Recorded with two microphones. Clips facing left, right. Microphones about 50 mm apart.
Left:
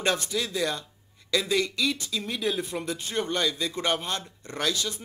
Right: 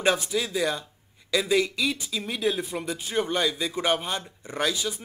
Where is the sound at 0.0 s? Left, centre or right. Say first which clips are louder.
Right 3 dB; centre.